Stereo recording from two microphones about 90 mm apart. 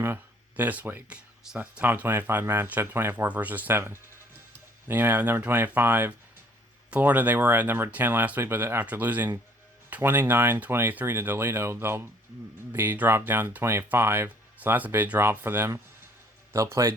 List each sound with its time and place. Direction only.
0.0 s speech: 20° right (ahead or behind)
16.5 s a man's voice: 35° right (ahead or behind)